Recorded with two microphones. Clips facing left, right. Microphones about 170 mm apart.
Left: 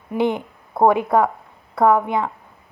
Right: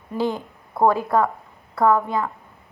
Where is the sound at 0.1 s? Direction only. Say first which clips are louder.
Left 4 dB; 20° left (ahead or behind).